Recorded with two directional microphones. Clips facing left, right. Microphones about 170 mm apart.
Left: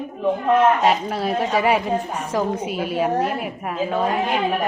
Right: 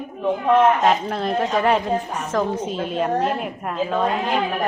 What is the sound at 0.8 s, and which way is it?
A woman's voice, 5° left (ahead or behind).